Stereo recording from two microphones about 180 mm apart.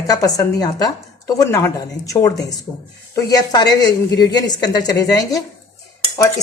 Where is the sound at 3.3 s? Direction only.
20° left (ahead or behind).